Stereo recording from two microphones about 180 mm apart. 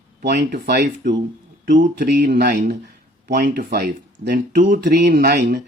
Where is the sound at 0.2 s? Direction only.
60° right (ahead or behind).